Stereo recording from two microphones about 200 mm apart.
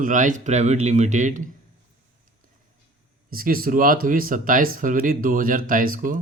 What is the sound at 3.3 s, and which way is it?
Speech, 45° right (ahead or behind).